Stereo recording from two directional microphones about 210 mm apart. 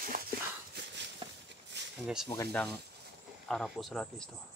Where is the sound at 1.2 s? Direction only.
25° right (ahead or behind).